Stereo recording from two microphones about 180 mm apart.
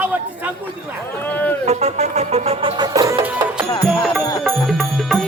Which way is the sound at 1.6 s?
35° right (ahead or behind).